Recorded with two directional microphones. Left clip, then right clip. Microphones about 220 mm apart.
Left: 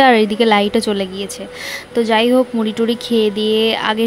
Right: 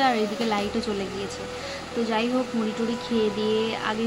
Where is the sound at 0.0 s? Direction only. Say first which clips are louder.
Left 12 dB; 45° left (ahead or behind).